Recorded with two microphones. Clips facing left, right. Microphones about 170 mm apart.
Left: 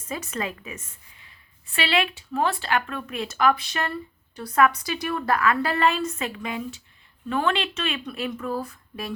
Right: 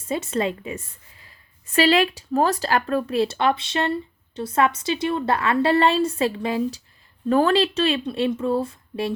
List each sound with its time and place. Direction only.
0.1 s a woman's voice: 30° right (ahead or behind)